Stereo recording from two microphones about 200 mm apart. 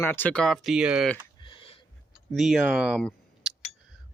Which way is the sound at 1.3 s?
25° left (ahead or behind).